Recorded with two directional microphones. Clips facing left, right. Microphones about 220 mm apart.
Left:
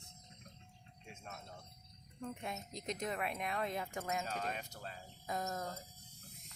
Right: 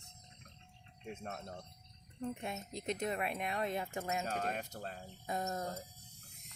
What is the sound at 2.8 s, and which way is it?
Cricket, 30° right (ahead or behind).